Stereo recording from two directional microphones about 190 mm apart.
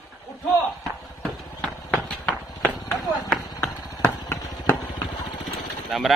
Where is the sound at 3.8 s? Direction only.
15° left (ahead or behind).